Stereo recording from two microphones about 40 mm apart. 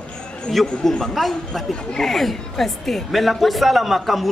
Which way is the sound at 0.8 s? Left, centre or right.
Centre.